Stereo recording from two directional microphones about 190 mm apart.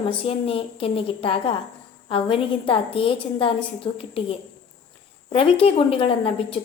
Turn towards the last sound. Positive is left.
turn(degrees=30)  # may be behind; listen again after turning